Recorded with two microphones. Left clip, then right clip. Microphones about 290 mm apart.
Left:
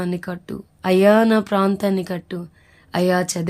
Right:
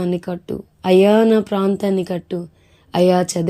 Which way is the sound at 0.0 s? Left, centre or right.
Centre.